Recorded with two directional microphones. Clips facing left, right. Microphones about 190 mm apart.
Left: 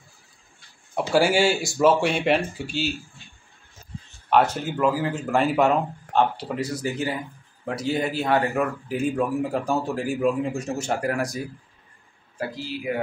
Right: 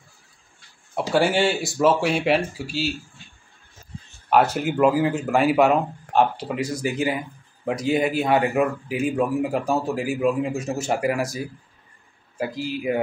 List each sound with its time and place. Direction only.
1.1 s speech: centre (ahead or behind)
4.3 s a man's voice: 5° right (ahead or behind)